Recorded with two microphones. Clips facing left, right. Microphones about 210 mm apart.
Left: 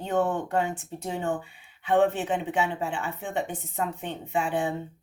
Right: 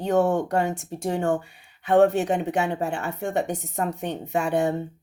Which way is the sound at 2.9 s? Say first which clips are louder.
Right 4 dB; 70° right (ahead or behind).